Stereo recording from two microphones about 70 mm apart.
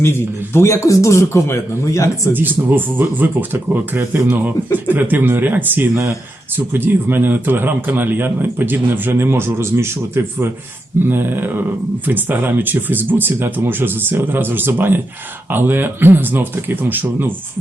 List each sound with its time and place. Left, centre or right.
0.0 s a man's voice: left
2.3 s speech: right